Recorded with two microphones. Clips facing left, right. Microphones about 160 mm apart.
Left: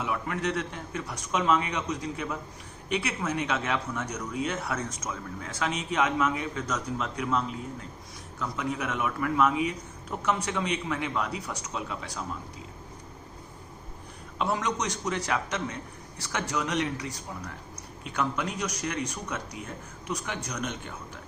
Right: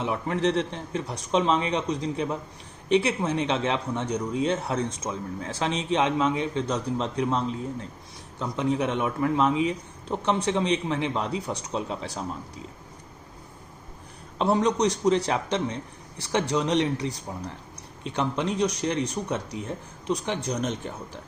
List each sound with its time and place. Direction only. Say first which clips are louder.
0.0 s speech: right 5 dB; 30° right (ahead or behind)
14.3 s speech: right 6 dB; 30° right (ahead or behind)